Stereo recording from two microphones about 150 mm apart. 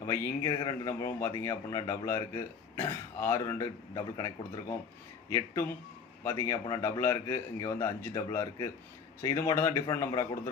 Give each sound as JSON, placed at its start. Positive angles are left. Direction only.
{"t": 0.0, "sound": "a man's voice", "side_deg": 20}
{"t": 6.2, "sound": "a man's voice", "side_deg": 20}